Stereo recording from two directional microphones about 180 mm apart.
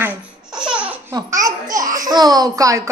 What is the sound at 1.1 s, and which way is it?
A child's voice, 20° right (ahead or behind).